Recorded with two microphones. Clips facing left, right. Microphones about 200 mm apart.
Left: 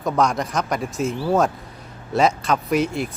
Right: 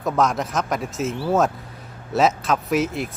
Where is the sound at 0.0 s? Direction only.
Centre (ahead or behind).